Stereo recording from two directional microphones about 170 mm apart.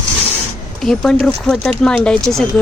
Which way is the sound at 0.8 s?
Centre (ahead or behind).